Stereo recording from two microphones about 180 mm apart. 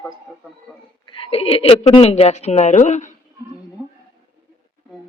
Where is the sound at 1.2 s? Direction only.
30° left (ahead or behind).